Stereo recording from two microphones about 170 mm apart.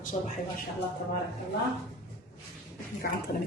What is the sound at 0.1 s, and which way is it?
Speech, 35° left (ahead or behind).